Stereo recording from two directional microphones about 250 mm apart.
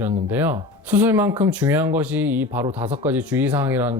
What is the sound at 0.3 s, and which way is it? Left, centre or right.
Speech, centre.